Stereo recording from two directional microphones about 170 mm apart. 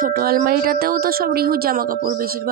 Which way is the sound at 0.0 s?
60° right (ahead or behind).